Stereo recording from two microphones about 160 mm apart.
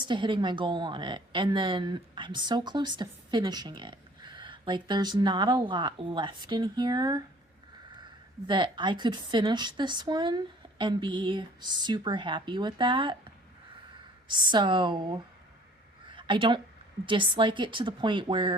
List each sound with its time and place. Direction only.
0.0 s a woman's voice: 30° right (ahead or behind)
8.4 s a woman's voice: 30° right (ahead or behind)